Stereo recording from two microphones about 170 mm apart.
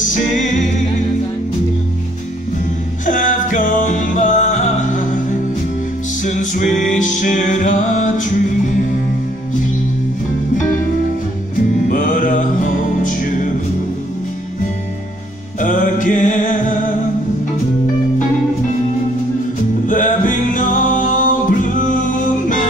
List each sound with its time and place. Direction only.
0.0 s music: 50° left (ahead or behind)
3.1 s music: 50° left (ahead or behind)
6.2 s music: 45° left (ahead or behind)
11.9 s music: 50° left (ahead or behind)
15.6 s mantra: 50° left (ahead or behind)
19.9 s music: 50° left (ahead or behind)